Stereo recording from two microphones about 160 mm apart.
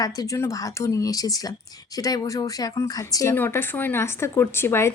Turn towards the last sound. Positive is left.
turn(degrees=15)  # may be behind; listen again after turning